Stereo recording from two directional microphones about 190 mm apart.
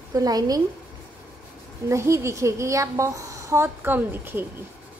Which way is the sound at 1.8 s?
15° right (ahead or behind).